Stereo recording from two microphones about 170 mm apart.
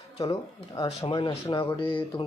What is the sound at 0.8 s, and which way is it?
Speech, 30° left (ahead or behind).